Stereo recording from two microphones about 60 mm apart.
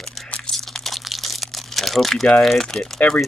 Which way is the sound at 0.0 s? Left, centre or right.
Centre.